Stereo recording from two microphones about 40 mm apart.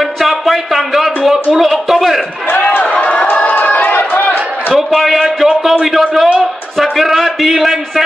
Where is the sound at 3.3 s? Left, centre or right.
Left.